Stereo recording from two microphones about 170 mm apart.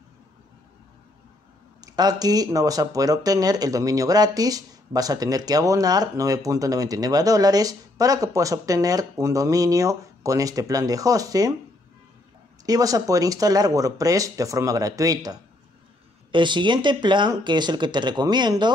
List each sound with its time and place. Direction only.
1.8 s speech: 25° right (ahead or behind)
12.6 s speech: 20° right (ahead or behind)